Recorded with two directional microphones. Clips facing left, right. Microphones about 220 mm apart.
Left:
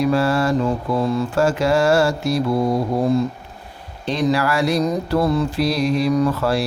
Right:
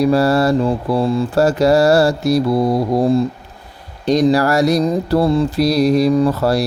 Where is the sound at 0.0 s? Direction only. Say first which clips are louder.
Right 4 dB; 35° right (ahead or behind).